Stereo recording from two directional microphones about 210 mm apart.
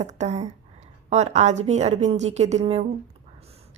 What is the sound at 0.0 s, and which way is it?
A woman's voice, 35° right (ahead or behind).